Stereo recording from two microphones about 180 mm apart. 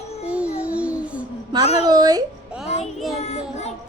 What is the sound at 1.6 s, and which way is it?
Speech, 35° left (ahead or behind).